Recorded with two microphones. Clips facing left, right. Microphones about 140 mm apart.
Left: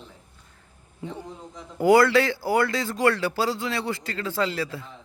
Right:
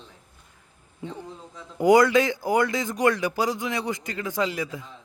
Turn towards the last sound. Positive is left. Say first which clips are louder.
# even
turn(degrees=-15)  # may be behind; listen again after turning